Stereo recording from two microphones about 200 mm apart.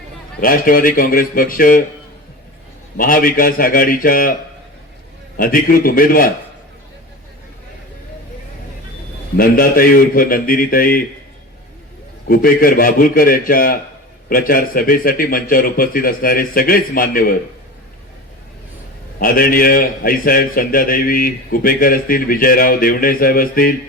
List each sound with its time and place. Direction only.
0.3 s a man's voice: 45° left (ahead or behind)
3.0 s a man's voice: 45° left (ahead or behind)
5.4 s a man's voice: 45° left (ahead or behind)
9.4 s a man's voice: 45° left (ahead or behind)
12.3 s a man's voice: 45° left (ahead or behind)
19.2 s a man's voice: 45° left (ahead or behind)